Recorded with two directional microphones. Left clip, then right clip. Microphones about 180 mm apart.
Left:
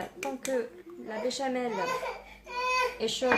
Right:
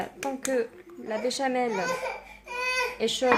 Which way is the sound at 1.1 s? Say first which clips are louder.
Right 4 dB; 45° right (ahead or behind).